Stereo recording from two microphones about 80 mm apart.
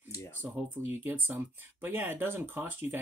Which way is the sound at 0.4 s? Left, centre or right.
Right.